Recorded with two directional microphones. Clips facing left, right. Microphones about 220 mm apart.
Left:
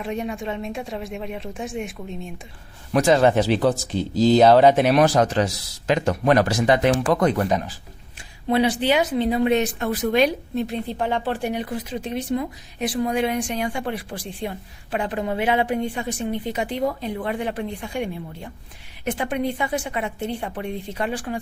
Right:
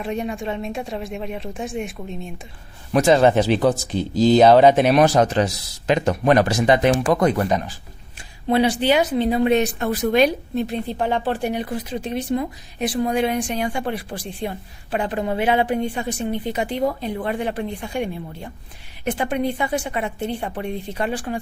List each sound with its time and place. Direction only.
0.0 s speech: 35° right (ahead or behind)
2.9 s speech: 25° right (ahead or behind)
7.4 s speech: centre (ahead or behind)
8.4 s speech: 35° right (ahead or behind)